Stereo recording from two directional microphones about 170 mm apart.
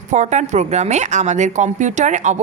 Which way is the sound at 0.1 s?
45° right (ahead or behind).